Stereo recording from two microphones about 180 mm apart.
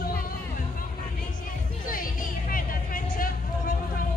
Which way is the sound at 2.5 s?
50° left (ahead or behind).